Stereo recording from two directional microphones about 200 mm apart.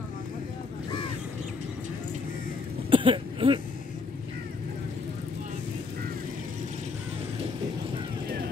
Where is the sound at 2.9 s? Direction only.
25° right (ahead or behind).